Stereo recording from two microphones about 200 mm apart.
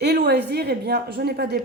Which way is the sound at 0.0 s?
55° right (ahead or behind).